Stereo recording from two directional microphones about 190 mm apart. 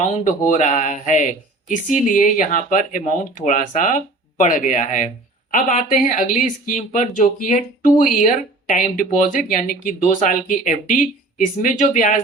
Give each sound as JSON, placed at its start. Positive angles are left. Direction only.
{"t": 0.3, "sound": "speech", "side_deg": 40}